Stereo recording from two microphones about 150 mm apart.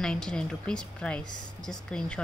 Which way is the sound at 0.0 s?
5° left (ahead or behind).